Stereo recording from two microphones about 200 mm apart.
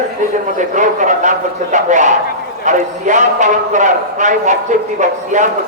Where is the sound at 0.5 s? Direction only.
40° right (ahead or behind).